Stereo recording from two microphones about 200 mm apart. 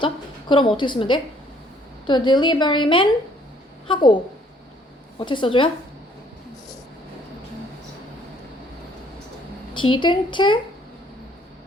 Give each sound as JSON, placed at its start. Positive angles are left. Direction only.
{"t": 0.0, "sound": "a sound", "side_deg": 25}
{"t": 0.8, "sound": "a woman's voice", "side_deg": 25}
{"t": 5.2, "sound": "a woman's voice", "side_deg": 25}
{"t": 9.7, "sound": "a woman's voice", "side_deg": 25}